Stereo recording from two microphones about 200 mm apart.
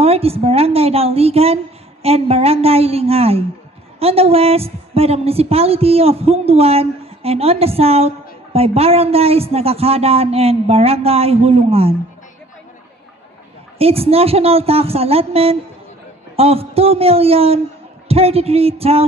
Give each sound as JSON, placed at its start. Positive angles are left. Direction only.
{"t": 0.0, "sound": "a sound", "side_deg": -30}
{"t": 2.0, "sound": "a woman's voice", "side_deg": -30}
{"t": 13.7, "sound": "a woman's voice", "side_deg": -30}